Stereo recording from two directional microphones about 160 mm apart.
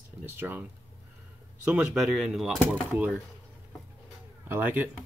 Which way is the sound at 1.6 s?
5° right (ahead or behind).